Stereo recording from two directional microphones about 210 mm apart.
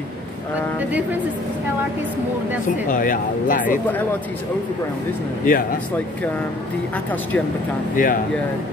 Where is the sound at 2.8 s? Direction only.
40° left (ahead or behind).